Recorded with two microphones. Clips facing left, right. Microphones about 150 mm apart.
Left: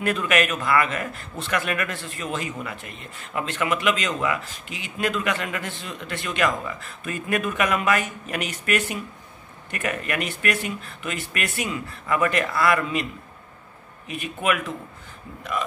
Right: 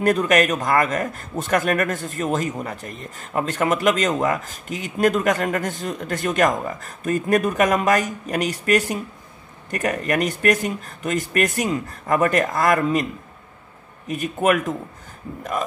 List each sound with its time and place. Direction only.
0.0 s a man's voice: 40° right (ahead or behind)
14.0 s a man's voice: 45° right (ahead or behind)